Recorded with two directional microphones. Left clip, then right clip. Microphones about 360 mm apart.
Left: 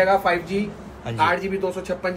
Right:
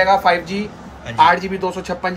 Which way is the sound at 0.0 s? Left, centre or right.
Centre.